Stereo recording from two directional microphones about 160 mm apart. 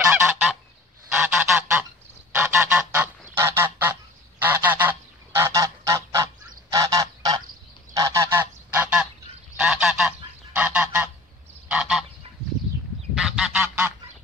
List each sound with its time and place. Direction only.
0.1 s goose: 10° right (ahead or behind)
11.7 s frog: 5° right (ahead or behind)
13.1 s goose: 5° right (ahead or behind)